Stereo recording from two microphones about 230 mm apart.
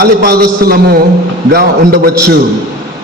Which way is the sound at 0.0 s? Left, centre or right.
Right.